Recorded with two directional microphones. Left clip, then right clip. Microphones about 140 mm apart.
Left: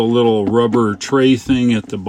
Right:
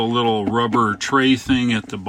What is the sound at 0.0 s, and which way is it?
Speech, 25° left (ahead or behind).